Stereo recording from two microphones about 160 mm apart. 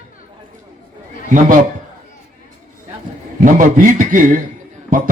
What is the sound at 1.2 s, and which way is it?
Speech, 55° right (ahead or behind).